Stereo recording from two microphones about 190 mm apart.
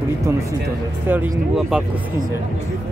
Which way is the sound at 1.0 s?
10° right (ahead or behind).